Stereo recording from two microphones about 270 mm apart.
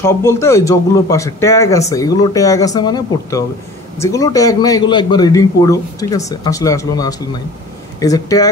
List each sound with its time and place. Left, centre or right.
0.0 s speech: centre